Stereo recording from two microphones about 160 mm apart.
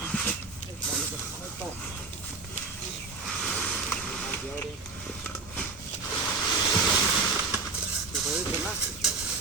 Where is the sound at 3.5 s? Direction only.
5° left (ahead or behind).